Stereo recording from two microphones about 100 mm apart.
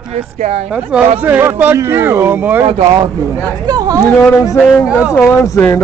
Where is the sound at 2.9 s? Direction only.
40° right (ahead or behind).